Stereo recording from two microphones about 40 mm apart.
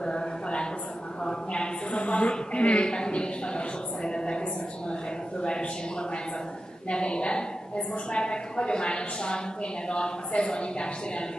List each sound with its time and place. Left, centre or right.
0.0 s a sound: left
5.4 s a woman's voice: left
6.9 s a woman's voice: left